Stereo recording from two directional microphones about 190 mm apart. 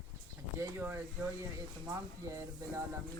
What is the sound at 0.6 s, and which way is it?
Speech, 10° right (ahead or behind).